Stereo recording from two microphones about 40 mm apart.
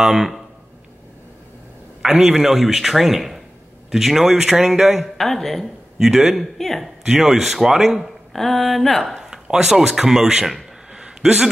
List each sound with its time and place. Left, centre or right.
0.0 s a man's voice: centre
2.0 s a man's voice: centre
5.0 s speech: centre
5.9 s a man's voice: centre
6.6 s speech: centre
7.1 s a man's voice: centre
8.3 s speech: centre
9.2 s a man's voice: centre
10.9 s a sound: centre